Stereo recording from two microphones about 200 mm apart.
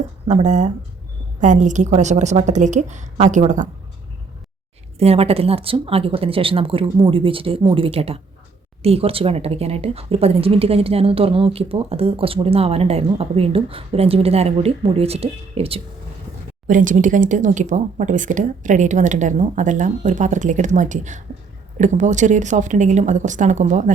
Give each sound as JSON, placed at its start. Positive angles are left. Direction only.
{"t": 0.3, "sound": "speech", "side_deg": -35}
{"t": 4.9, "sound": "speech", "side_deg": -30}
{"t": 16.6, "sound": "speech", "side_deg": -40}